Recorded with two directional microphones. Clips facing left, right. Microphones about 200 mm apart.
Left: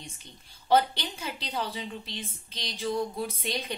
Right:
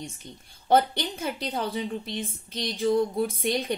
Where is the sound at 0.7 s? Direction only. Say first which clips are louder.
Right 2 dB; 50° right (ahead or behind).